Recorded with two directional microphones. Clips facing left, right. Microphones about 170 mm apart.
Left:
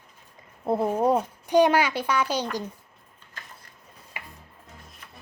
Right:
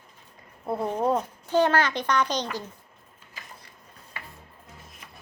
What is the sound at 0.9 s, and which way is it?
A child's voice, 10° left (ahead or behind).